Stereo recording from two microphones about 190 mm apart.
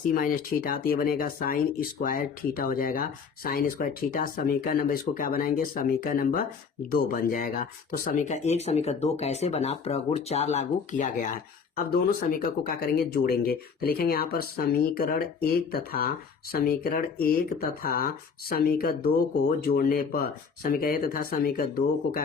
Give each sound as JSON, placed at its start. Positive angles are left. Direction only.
{"t": 0.1, "sound": "speech", "side_deg": 45}
{"t": 12.3, "sound": "speech", "side_deg": 50}